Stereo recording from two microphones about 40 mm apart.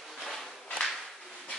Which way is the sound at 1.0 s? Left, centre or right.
Centre.